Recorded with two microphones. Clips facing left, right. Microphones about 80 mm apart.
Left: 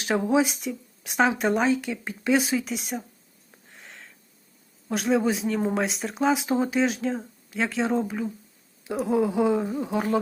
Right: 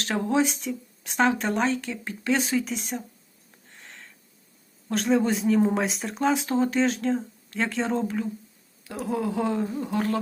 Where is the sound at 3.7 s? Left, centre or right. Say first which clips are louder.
Left 1 dB; centre.